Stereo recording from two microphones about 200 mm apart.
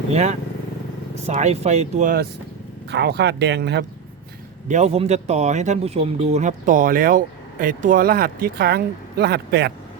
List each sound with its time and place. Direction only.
0.1 s speech: 35° right (ahead or behind)
2.9 s speech: 55° right (ahead or behind)
4.7 s speech: 30° right (ahead or behind); by 9.7 s 55° right (ahead or behind)